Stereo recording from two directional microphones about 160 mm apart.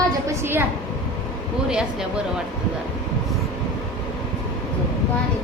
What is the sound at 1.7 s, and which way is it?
Speech, 5° right (ahead or behind).